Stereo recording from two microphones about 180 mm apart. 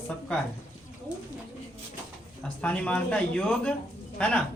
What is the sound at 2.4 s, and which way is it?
Speech, 5° left (ahead or behind).